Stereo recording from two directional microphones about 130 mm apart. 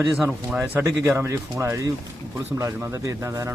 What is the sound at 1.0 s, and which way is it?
Speech, 15° right (ahead or behind).